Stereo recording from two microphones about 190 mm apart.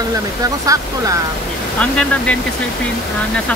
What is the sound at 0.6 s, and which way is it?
Speech, 15° right (ahead or behind).